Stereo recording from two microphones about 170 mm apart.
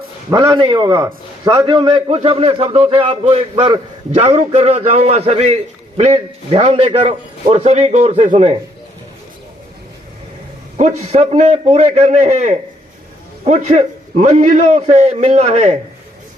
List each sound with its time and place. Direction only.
0.3 s a man's voice: 25° right (ahead or behind)
10.8 s a man's voice: 40° right (ahead or behind)